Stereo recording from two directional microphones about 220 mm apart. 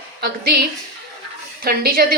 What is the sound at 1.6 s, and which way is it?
Speech, 45° right (ahead or behind).